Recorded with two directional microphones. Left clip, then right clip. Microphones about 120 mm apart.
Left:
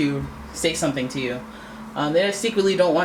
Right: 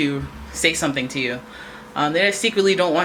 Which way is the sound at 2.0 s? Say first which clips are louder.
Right 2 dB; 40° right (ahead or behind).